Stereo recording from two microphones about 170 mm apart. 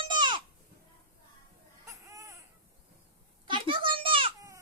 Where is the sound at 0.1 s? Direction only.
25° right (ahead or behind).